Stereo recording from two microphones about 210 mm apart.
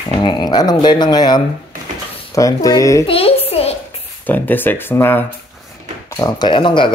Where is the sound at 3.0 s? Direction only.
25° left (ahead or behind).